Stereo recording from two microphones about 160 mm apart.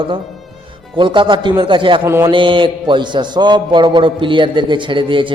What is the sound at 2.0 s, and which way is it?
Speech, 15° right (ahead or behind).